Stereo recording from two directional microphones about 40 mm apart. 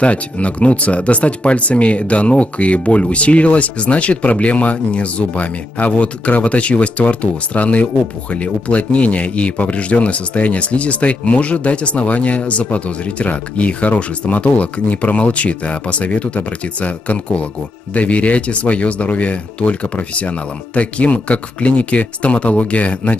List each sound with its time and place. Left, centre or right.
0.0 s speech: left